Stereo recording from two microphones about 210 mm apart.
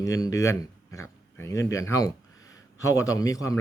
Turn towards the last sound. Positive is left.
turn(degrees=15)  # may be behind; listen again after turning